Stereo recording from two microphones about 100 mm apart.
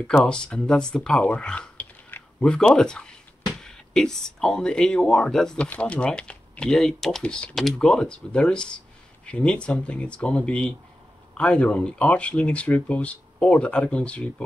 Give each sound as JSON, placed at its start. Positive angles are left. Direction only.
{"t": 0.0, "sound": "speech", "side_deg": 10}